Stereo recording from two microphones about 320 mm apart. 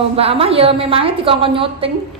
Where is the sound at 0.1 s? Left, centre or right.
Centre.